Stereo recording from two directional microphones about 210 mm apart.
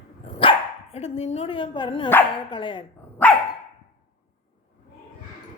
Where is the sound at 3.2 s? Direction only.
10° left (ahead or behind).